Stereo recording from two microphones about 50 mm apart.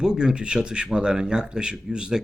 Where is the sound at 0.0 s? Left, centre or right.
Centre.